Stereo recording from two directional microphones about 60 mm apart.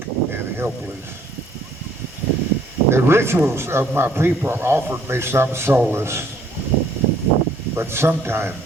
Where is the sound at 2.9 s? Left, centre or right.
Right.